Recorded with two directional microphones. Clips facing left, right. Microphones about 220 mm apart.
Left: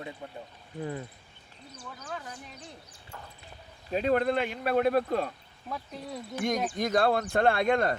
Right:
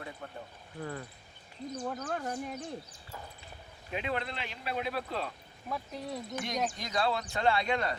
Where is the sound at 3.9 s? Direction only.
45° left (ahead or behind).